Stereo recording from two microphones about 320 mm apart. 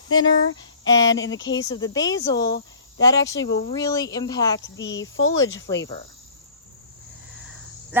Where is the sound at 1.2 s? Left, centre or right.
Centre.